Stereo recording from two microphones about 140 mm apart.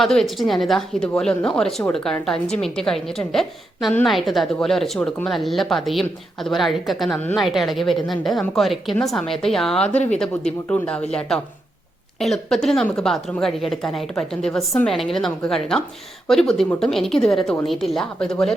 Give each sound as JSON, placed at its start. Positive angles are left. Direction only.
{"t": 0.0, "sound": "a woman's voice", "side_deg": 5}
{"t": 7.2, "sound": "speech", "side_deg": 10}
{"t": 7.4, "sound": "a woman's voice", "side_deg": 0}